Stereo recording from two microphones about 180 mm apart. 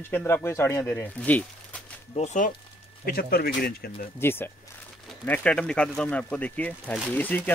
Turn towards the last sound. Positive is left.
turn(degrees=10)  # may be behind; listen again after turning